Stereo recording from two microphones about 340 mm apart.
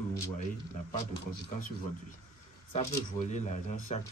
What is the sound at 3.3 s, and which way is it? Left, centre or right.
Speech, centre.